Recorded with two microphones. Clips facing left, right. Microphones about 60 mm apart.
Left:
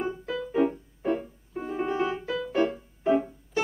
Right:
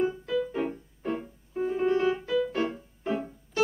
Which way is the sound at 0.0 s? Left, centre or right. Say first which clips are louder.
Right 4 dB; centre.